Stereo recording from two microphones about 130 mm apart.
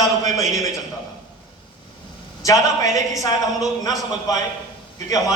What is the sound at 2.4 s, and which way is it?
A man's voice, 25° left (ahead or behind).